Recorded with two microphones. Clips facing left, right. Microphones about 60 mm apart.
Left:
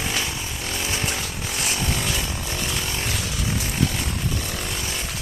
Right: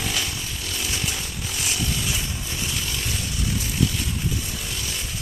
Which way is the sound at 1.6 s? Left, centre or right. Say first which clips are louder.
Left 2 dB; left.